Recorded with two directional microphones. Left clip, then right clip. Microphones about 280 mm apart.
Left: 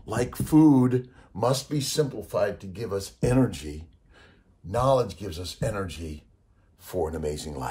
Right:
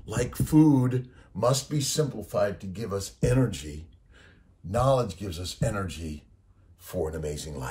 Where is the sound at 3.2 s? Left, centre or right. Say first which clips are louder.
Left 2 dB; centre.